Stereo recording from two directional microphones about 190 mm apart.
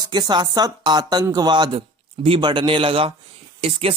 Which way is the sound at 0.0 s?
20° right (ahead or behind).